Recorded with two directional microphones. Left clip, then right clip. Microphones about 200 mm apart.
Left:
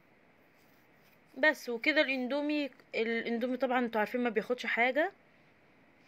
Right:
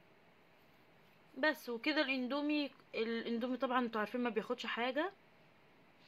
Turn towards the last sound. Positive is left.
turn(degrees=20)  # may be behind; listen again after turning